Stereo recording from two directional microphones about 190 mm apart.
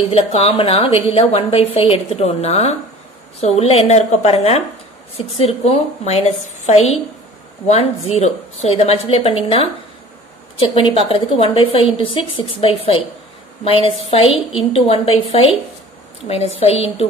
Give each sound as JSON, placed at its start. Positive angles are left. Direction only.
{"t": 0.1, "sound": "a woman's voice", "side_deg": 30}